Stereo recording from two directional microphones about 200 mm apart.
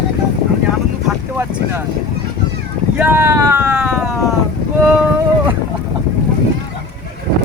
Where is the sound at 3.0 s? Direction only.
10° right (ahead or behind).